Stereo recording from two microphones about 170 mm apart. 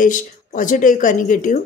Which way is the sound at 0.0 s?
50° left (ahead or behind).